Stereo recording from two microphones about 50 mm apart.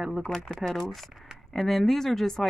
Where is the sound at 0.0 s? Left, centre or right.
Centre.